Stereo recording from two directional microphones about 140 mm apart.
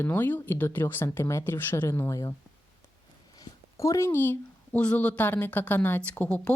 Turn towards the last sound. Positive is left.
turn(degrees=10)  # may be behind; listen again after turning